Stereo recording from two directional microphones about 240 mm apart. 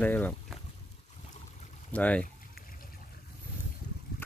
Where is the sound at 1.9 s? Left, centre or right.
Centre.